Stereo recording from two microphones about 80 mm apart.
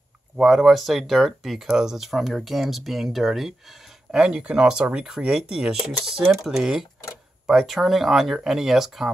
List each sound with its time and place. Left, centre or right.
0.4 s speech: centre